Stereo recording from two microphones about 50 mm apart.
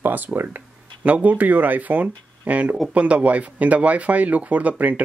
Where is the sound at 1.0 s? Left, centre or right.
Right.